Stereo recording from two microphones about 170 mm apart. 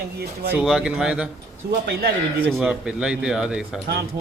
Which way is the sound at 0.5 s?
5° right (ahead or behind).